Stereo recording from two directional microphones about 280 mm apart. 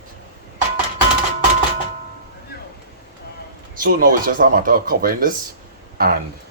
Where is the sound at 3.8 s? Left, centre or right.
Right.